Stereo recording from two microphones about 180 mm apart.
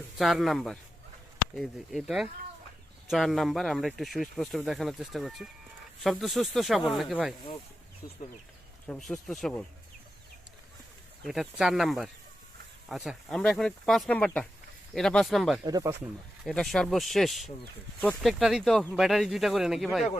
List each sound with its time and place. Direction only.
0.2 s speech: centre (ahead or behind)
8.0 s speech: 20° left (ahead or behind)
8.9 s speech: centre (ahead or behind)
11.2 s speech: centre (ahead or behind)
15.6 s speech: 20° right (ahead or behind)
16.4 s speech: centre (ahead or behind)